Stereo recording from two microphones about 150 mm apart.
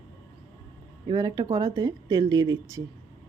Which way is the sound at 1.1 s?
25° right (ahead or behind).